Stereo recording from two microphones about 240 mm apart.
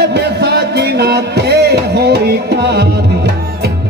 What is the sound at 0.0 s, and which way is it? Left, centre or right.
Music, right.